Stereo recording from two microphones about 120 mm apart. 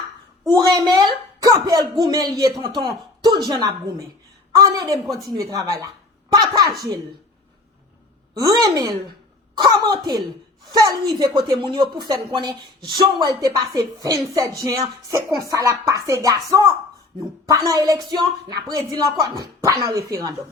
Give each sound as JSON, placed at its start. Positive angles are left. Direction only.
{"t": 0.4, "sound": "speech", "side_deg": -35}
{"t": 8.4, "sound": "speech", "side_deg": -30}